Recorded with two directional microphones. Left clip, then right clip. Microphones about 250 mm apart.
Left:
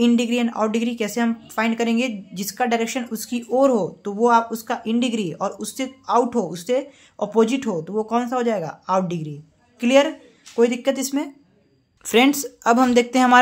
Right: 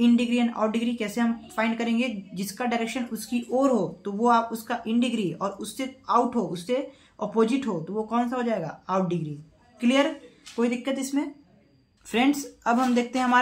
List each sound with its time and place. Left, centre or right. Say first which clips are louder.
0.0 s a woman's voice: left 4 dB; left